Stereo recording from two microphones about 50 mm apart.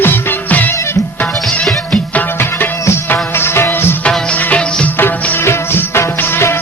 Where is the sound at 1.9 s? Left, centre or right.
Left.